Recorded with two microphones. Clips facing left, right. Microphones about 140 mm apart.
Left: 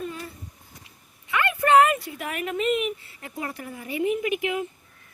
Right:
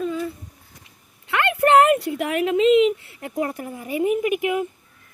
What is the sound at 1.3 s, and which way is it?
Speech, 70° right (ahead or behind).